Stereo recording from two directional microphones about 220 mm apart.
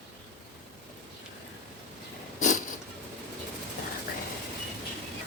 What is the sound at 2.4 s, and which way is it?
Cat, 35° left (ahead or behind).